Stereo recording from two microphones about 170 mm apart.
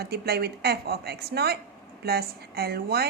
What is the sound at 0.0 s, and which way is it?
A woman's voice, 65° right (ahead or behind).